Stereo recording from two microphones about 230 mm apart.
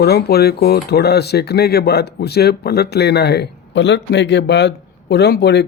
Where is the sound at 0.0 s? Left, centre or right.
Left.